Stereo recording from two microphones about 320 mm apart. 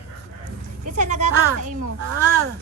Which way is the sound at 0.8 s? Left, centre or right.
Right.